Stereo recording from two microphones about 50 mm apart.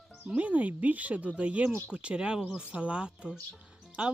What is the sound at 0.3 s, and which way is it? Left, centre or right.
Speech, right.